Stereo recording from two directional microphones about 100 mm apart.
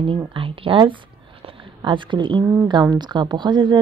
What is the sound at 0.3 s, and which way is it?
Speech, 60° right (ahead or behind).